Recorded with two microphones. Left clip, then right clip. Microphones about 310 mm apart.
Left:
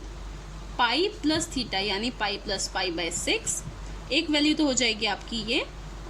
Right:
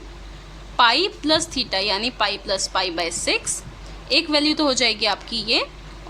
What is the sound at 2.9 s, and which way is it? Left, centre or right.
Speech, right.